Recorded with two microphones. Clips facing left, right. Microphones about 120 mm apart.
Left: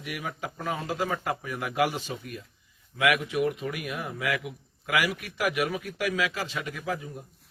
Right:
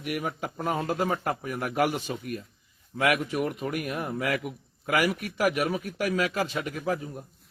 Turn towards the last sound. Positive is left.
turn(degrees=-45)  # may be behind; listen again after turning